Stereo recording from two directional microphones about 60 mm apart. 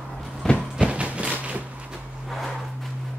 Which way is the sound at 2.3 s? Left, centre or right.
Centre.